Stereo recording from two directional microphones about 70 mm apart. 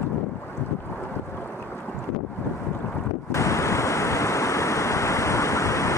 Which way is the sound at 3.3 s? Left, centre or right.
Left.